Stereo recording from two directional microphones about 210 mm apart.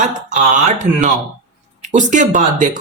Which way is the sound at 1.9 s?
35° right (ahead or behind).